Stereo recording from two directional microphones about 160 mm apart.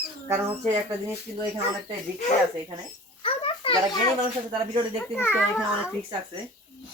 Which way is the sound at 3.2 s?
35° left (ahead or behind).